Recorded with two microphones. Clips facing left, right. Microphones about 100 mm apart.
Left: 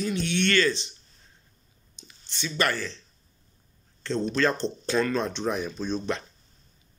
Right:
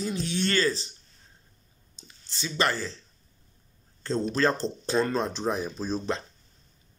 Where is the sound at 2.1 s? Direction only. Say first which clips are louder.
Left 1 dB; 30° right (ahead or behind).